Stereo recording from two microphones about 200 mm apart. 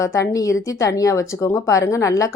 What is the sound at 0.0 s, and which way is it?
A woman's voice, 15° left (ahead or behind).